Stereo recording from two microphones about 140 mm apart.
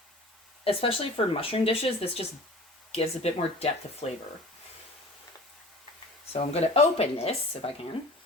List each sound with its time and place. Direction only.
0.6 s speech: 40° left (ahead or behind)
6.3 s speech: 50° left (ahead or behind)